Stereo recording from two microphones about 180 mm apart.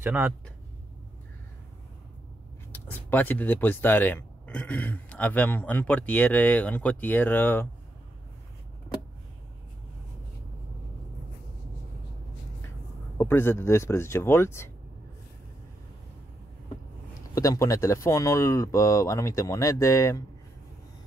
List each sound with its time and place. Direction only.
0.0 s speech: 15° right (ahead or behind)
2.7 s speech: 10° left (ahead or behind)
13.2 s speech: 15° left (ahead or behind)
17.3 s speech: 20° left (ahead or behind)